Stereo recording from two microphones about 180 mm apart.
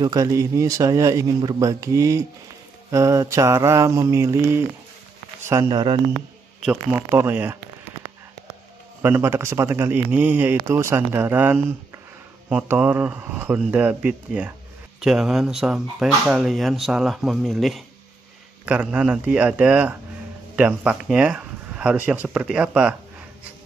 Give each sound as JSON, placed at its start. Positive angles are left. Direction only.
{"t": 0.0, "sound": "speech", "side_deg": -20}
{"t": 6.6, "sound": "speech", "side_deg": -5}
{"t": 9.0, "sound": "speech", "side_deg": -15}